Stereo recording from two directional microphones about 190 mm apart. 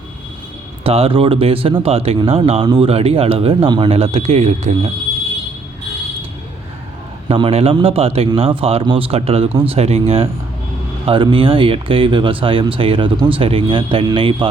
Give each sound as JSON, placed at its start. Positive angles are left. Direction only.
{"t": 0.9, "sound": "speech", "side_deg": -30}
{"t": 7.3, "sound": "speech", "side_deg": -30}